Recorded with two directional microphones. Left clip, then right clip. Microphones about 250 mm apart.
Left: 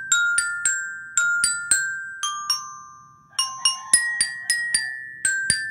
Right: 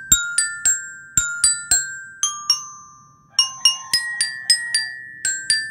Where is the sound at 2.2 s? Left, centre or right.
Centre.